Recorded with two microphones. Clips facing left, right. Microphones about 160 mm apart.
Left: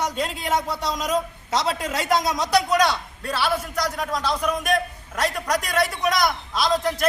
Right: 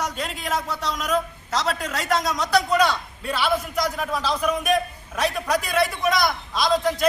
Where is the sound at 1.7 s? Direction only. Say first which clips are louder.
Left 2 dB; centre (ahead or behind).